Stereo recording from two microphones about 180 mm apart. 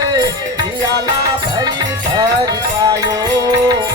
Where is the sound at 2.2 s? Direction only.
20° right (ahead or behind).